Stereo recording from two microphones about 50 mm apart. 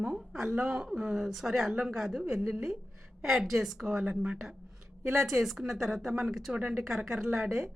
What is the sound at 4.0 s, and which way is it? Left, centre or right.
Speech, right.